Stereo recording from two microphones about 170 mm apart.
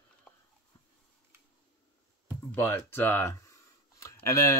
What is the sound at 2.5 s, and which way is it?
Speech, 10° left (ahead or behind).